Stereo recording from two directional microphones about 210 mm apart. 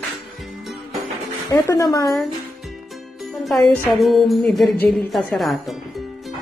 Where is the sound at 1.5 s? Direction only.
15° left (ahead or behind).